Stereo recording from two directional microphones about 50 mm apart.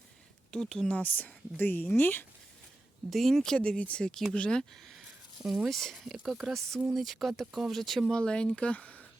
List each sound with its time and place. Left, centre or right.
0.5 s speech: centre
1.0 s speech: left
3.1 s speech: centre
3.6 s speech: left
4.9 s speech: centre
8.1 s speech: centre